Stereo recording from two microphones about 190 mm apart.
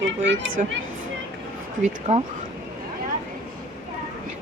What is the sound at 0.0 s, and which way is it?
Speech, 80° right.